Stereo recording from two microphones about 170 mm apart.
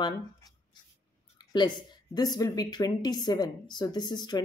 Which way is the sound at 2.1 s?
25° left (ahead or behind).